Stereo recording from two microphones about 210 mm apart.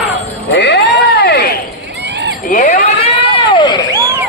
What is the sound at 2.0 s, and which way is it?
Run, 55° right (ahead or behind).